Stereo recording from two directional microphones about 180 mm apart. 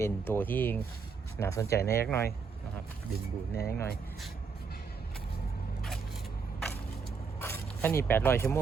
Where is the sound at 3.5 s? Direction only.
60° left (ahead or behind).